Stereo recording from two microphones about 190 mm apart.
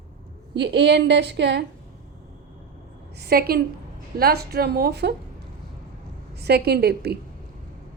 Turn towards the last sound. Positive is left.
turn(degrees=-55)  # may be behind; listen again after turning